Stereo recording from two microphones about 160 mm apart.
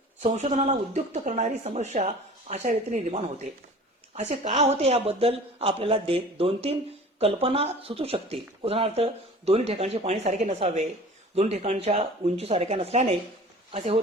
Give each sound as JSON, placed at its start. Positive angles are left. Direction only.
{"t": 0.2, "sound": "speech", "side_deg": -45}